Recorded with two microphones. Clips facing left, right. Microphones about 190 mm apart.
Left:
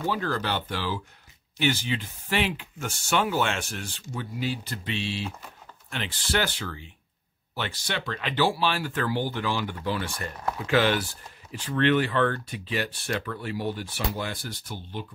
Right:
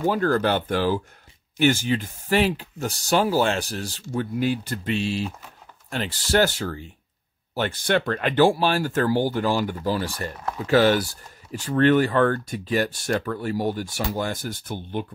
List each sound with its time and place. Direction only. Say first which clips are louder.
0.0 s speech: right 7 dB; 45° right (ahead or behind)